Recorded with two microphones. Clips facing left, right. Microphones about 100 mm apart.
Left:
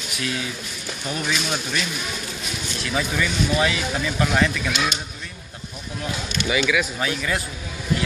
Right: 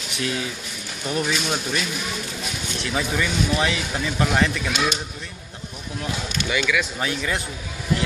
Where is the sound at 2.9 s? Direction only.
25° right (ahead or behind).